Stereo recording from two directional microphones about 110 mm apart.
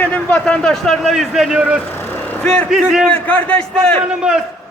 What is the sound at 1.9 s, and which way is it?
Vehicle, 20° left (ahead or behind).